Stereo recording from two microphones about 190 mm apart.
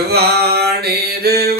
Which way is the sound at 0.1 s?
55° right (ahead or behind).